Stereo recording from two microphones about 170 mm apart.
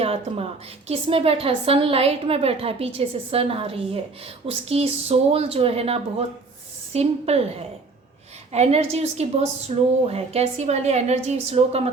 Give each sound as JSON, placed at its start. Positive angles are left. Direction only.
{"t": 0.0, "sound": "a woman's voice", "side_deg": -35}